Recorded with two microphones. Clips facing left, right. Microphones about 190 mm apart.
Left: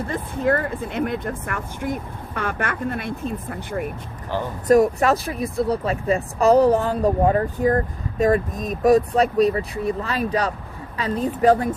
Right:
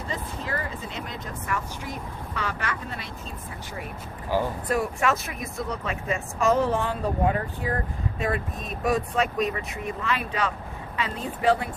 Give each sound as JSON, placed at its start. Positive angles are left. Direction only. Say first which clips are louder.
{"t": 0.1, "sound": "speech", "louder": "left 11 dB", "side_deg": 55}
{"t": 4.3, "sound": "speech", "louder": "right 1 dB", "side_deg": -10}
{"t": 4.7, "sound": "speech", "louder": "left 10 dB", "side_deg": 40}